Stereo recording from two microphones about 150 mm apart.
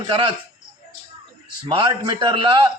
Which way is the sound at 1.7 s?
35° right (ahead or behind).